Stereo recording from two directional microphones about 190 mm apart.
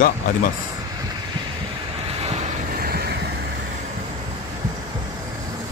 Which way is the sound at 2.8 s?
55° right (ahead or behind).